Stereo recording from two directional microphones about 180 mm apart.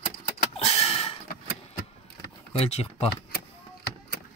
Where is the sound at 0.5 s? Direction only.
35° left (ahead or behind).